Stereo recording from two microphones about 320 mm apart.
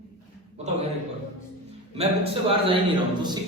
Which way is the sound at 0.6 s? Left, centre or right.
Centre.